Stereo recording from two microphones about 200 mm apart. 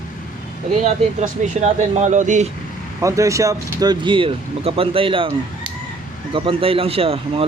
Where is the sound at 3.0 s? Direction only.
15° right (ahead or behind).